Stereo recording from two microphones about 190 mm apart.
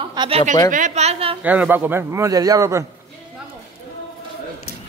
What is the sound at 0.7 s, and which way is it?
Speech, 40° right (ahead or behind).